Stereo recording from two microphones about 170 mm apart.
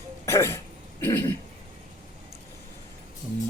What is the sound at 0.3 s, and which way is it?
Throat clearing, 15° left (ahead or behind).